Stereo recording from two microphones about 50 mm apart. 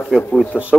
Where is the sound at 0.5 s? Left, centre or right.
Right.